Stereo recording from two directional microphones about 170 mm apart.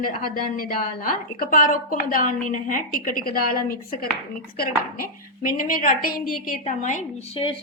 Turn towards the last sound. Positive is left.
turn(degrees=35)  # may be behind; listen again after turning